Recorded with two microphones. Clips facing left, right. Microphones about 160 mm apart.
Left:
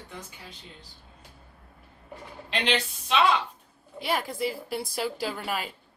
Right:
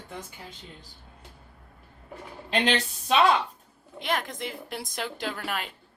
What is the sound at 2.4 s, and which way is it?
Speech, 40° right (ahead or behind).